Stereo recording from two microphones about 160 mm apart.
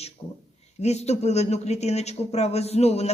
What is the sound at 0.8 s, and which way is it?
A man's voice, 45° left (ahead or behind).